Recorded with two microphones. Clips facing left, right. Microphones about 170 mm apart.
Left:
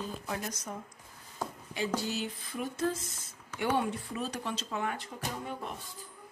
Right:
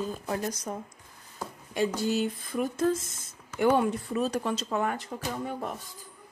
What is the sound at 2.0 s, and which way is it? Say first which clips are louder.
Speech: right 8 dB; 50° right (ahead or behind).